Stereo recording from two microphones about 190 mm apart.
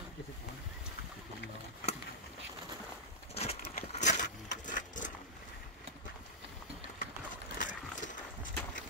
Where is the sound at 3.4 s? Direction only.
35° left (ahead or behind).